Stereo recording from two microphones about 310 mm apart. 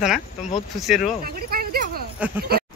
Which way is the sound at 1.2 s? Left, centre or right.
Right.